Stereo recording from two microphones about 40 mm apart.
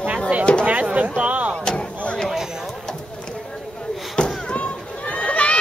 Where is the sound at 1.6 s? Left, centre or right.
Left.